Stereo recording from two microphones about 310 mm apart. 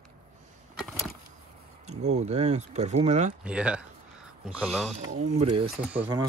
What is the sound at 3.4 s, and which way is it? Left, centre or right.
Speech, centre.